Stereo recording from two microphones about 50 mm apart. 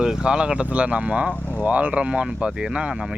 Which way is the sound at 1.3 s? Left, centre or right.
Left.